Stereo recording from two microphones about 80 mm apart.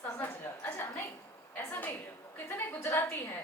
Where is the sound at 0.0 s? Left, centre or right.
Left.